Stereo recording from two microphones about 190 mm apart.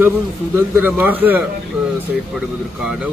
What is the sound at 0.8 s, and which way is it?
A man's voice, 10° right (ahead or behind).